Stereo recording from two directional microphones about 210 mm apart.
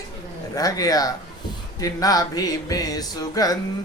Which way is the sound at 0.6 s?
15° left (ahead or behind).